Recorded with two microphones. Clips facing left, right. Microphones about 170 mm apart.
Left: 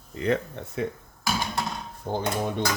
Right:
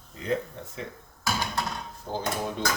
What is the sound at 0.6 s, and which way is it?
Speech, 70° left (ahead or behind).